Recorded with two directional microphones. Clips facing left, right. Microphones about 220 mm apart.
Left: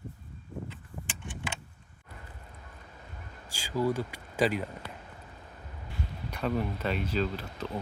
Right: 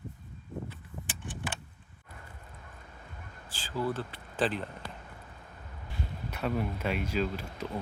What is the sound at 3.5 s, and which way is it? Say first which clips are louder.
Speech: left 4 dB; 10° left (ahead or behind).